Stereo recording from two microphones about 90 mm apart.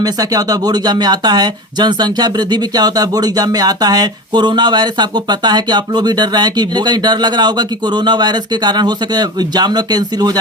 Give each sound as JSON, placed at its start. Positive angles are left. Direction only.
{"t": 0.0, "sound": "speech", "side_deg": -45}